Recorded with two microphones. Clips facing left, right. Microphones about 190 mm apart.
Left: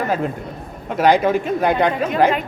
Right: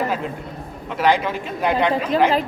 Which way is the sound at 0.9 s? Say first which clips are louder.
Left 4 dB; 45° left (ahead or behind).